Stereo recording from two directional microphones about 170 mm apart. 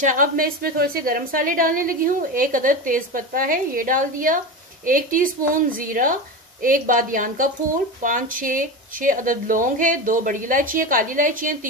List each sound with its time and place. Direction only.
0.0 s a woman's voice: 50° right (ahead or behind)